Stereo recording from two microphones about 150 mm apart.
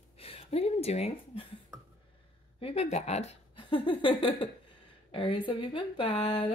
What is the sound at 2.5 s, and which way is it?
Speech, 40° left (ahead or behind).